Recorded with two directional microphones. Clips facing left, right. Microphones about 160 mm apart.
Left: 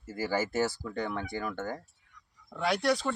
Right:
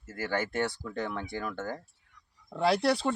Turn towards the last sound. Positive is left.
turn(degrees=-30)  # may be behind; listen again after turning